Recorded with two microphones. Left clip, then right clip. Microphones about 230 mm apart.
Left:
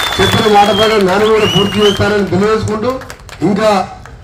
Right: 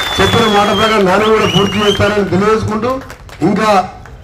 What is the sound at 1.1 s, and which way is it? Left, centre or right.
A man's voice, right.